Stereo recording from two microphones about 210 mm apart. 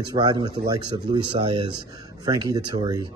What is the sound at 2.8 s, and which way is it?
Speech, 20° right (ahead or behind).